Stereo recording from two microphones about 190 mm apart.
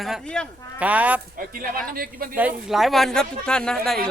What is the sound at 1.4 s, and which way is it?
Speech, 50° right (ahead or behind).